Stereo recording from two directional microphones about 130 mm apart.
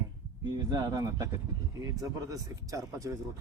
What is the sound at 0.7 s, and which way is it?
Speech, 30° right (ahead or behind).